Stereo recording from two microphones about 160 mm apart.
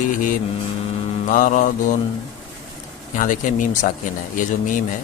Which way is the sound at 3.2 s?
55° left (ahead or behind).